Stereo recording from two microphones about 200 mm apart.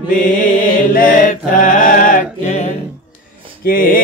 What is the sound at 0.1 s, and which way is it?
Music, 40° left (ahead or behind).